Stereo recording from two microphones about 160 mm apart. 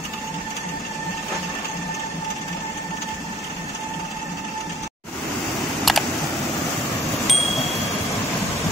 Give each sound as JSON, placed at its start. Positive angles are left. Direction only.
{"t": 5.9, "sound": "camera", "side_deg": 0}
{"t": 7.2, "sound": "chime", "side_deg": 0}